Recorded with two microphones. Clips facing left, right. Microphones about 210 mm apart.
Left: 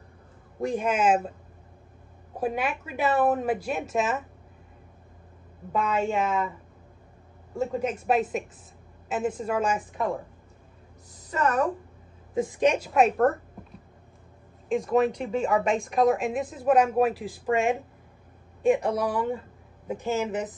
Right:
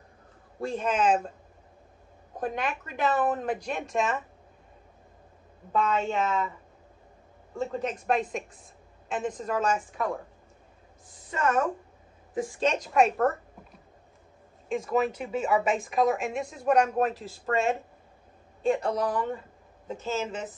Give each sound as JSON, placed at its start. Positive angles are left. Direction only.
{"t": 0.6, "sound": "a woman's voice", "side_deg": 15}
{"t": 2.3, "sound": "a woman's voice", "side_deg": 5}
{"t": 5.7, "sound": "a woman's voice", "side_deg": 10}
{"t": 7.5, "sound": "a woman's voice", "side_deg": 10}
{"t": 11.1, "sound": "a woman's voice", "side_deg": 40}
{"t": 12.4, "sound": "a woman's voice", "side_deg": 20}
{"t": 14.7, "sound": "a woman's voice", "side_deg": 0}